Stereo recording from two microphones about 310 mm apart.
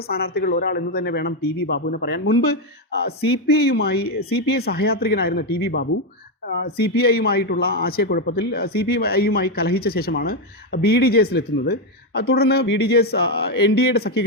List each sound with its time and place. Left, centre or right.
0.1 s a man's voice: left